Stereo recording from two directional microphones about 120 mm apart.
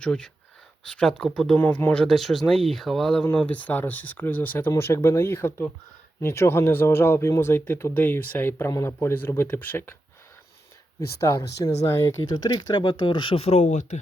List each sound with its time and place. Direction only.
0.0 s speech: 5° left (ahead or behind)
11.2 s speech: 25° left (ahead or behind)
12.2 s speech: 35° left (ahead or behind); by 14.0 s 85° left